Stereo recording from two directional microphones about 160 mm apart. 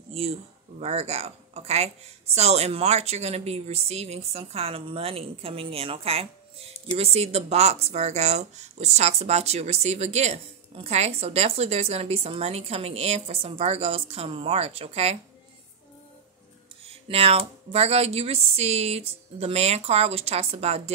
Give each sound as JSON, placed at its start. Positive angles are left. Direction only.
{"t": 0.1, "sound": "speech", "side_deg": -40}
{"t": 17.1, "sound": "speech", "side_deg": -40}